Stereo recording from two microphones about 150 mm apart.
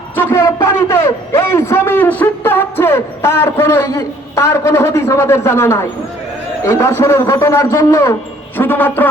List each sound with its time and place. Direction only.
0.2 s a man's voice: 15° left (ahead or behind)